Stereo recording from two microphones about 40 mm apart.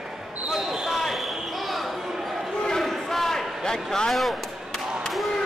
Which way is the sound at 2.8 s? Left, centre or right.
Centre.